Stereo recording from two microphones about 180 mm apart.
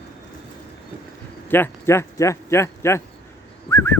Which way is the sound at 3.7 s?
15° left (ahead or behind).